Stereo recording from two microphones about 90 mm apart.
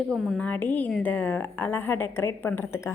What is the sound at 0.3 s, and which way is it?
A woman's voice, 15° left (ahead or behind).